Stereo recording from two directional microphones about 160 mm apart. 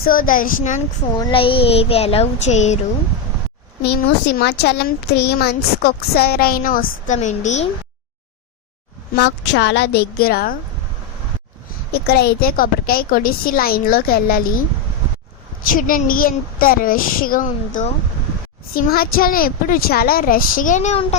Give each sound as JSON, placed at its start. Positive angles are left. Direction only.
{"t": 0.0, "sound": "speech", "side_deg": 60}
{"t": 1.2, "sound": "speech", "side_deg": 35}
{"t": 4.4, "sound": "speech", "side_deg": 90}
{"t": 9.1, "sound": "a woman's voice", "side_deg": 90}
{"t": 11.9, "sound": "speech", "side_deg": 80}
{"t": 15.6, "sound": "speech", "side_deg": 60}
{"t": 18.7, "sound": "speech", "side_deg": 70}